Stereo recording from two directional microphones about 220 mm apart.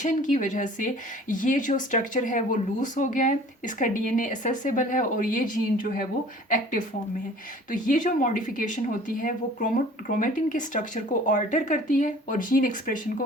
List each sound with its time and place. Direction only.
0.0 s speech: 35° left (ahead or behind)
7.7 s speech: 35° left (ahead or behind)